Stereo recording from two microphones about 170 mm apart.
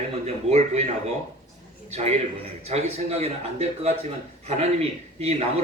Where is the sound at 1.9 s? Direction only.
40° right (ahead or behind).